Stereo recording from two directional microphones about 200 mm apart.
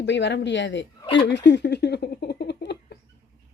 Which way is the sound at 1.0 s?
25° left (ahead or behind).